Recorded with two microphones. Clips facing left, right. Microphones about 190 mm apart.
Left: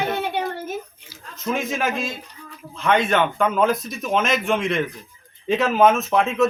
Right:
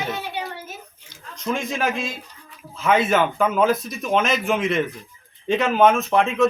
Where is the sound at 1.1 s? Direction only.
5° left (ahead or behind).